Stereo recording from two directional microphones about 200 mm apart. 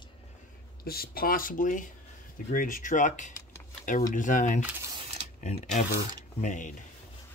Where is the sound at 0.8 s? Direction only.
50° left (ahead or behind).